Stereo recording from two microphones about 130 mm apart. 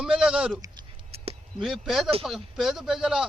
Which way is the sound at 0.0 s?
5° right (ahead or behind).